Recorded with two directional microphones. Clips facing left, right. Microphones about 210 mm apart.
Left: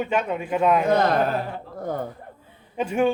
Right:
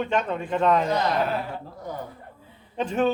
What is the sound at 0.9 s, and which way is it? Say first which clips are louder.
Speech: left 4 dB; 50° left (ahead or behind).